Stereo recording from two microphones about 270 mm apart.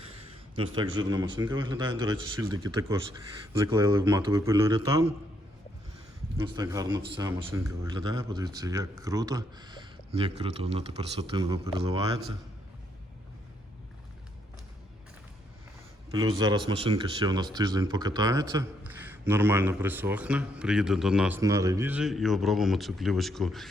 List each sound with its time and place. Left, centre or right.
0.5 s speech: centre
6.3 s speech: centre
16.6 s speech: right; by 23.6 s centre